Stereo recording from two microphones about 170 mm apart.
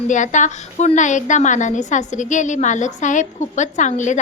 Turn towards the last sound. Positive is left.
turn(degrees=45)  # may be behind; listen again after turning